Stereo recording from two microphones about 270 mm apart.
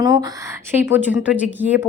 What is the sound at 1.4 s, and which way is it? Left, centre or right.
Speech, centre.